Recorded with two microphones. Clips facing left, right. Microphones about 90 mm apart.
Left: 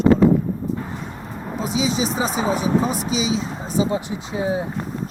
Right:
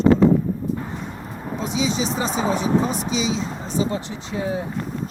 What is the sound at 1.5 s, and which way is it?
Speech, 5° left (ahead or behind).